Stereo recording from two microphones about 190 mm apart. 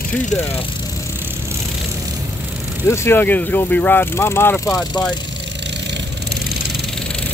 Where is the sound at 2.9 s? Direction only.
15° left (ahead or behind).